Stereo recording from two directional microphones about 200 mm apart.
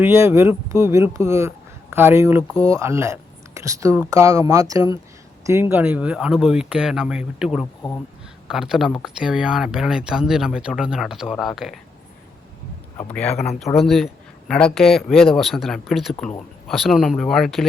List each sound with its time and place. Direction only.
0.0 s speech: 10° right (ahead or behind)
7.6 s speech: 20° left (ahead or behind)
8.4 s speech: centre (ahead or behind)
13.0 s speech: 5° left (ahead or behind)